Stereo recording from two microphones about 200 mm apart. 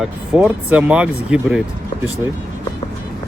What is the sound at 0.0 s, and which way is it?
Speech, 5° right (ahead or behind).